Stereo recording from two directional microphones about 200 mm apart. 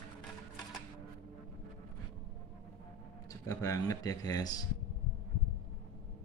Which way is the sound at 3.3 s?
15° left (ahead or behind).